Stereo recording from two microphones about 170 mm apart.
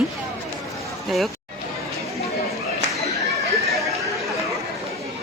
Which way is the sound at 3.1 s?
20° left (ahead or behind).